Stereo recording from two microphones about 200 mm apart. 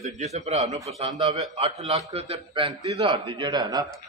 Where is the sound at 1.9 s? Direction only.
30° right (ahead or behind).